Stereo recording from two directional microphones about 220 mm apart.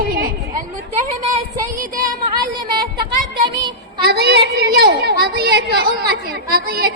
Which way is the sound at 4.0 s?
45° right (ahead or behind).